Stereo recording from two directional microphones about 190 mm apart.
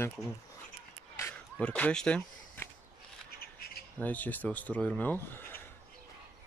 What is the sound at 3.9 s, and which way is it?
Speech, 10° left (ahead or behind).